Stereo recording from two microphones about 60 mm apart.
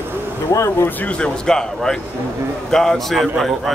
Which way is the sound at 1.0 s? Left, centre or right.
Centre.